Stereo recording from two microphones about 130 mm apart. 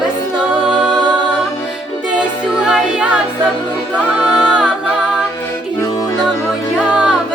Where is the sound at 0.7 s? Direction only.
35° right (ahead or behind).